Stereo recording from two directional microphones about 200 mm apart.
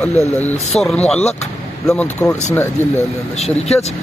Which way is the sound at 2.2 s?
15° left (ahead or behind).